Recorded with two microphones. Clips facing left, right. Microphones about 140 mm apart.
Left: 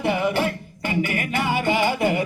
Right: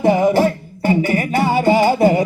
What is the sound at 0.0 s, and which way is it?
Music, 40° right (ahead or behind).